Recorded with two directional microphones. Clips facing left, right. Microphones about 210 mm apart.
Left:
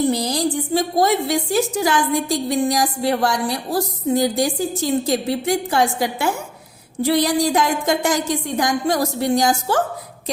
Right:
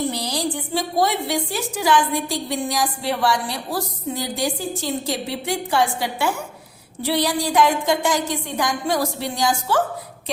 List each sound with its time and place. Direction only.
0.1 s a woman's voice: 45° left (ahead or behind)
7.0 s a woman's voice: 45° left (ahead or behind)